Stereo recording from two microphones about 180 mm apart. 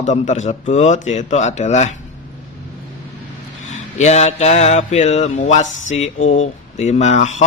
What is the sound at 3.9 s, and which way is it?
A man's voice, 40° left (ahead or behind).